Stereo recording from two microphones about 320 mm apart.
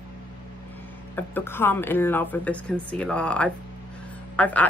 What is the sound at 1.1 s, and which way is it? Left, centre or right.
Speech, centre.